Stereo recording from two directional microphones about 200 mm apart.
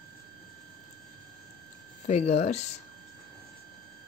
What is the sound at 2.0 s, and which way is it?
Speech, 35° left (ahead or behind).